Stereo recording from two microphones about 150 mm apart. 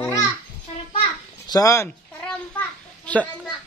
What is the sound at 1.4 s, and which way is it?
Speech, 25° left (ahead or behind).